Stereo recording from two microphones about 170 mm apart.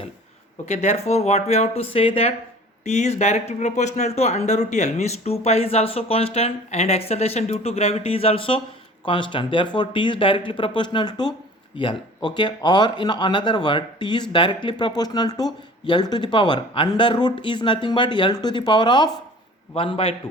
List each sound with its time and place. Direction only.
0.6 s speech: 40° left (ahead or behind)